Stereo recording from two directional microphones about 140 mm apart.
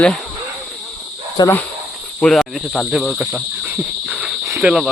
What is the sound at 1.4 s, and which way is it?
Speech, 30° left (ahead or behind).